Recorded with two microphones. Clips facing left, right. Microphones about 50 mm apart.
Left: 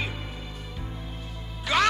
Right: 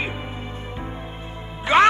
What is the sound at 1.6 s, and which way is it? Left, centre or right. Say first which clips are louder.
Music: right 8 dB; right.